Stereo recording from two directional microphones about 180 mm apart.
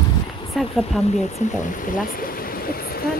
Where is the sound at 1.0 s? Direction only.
35° left (ahead or behind).